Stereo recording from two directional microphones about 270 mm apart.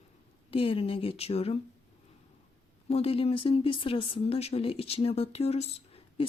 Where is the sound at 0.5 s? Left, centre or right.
Left.